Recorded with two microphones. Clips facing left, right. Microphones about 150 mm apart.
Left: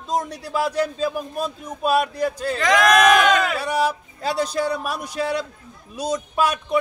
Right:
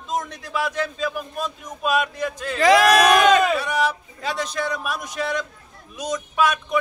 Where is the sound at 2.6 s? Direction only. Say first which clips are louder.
Right 4 dB; 35° right (ahead or behind).